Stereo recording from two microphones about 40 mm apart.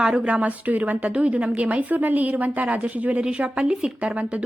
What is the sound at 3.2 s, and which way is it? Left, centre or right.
Speech, right.